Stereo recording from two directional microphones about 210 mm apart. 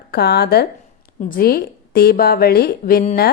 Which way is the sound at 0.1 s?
50° left (ahead or behind).